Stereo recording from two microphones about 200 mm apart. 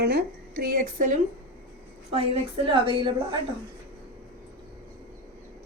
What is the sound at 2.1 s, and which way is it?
A woman's voice, 30° right (ahead or behind).